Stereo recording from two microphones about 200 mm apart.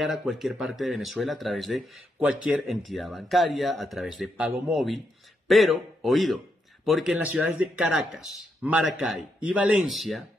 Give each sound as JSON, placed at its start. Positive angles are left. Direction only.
{"t": 0.0, "sound": "speech", "side_deg": 0}